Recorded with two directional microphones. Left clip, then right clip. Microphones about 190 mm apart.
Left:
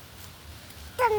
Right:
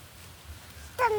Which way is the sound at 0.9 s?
25° right (ahead or behind).